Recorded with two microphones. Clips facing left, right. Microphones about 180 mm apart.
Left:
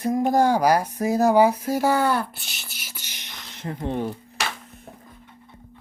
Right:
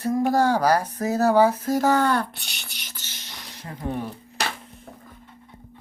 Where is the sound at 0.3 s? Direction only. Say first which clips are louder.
Left 2 dB; 15° left (ahead or behind).